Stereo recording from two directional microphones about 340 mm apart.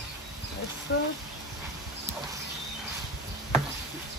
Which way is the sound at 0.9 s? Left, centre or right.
Left.